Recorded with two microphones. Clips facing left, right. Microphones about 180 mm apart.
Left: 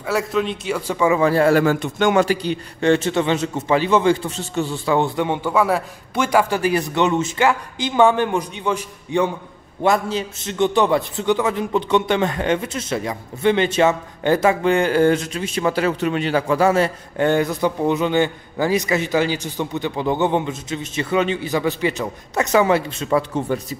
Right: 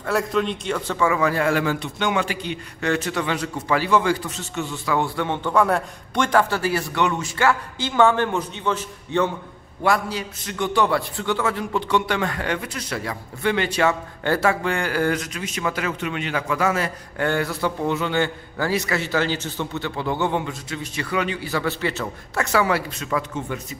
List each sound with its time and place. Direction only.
0.0 s a man's voice: centre (ahead or behind); by 23.8 s 35° left (ahead or behind)